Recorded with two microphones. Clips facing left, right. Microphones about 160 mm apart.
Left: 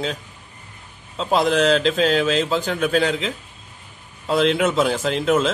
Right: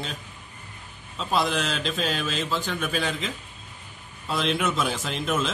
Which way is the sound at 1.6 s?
90° left.